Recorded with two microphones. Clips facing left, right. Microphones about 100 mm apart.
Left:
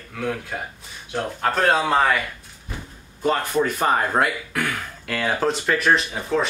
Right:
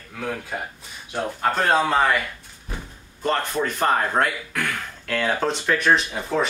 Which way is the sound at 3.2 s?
5° left (ahead or behind).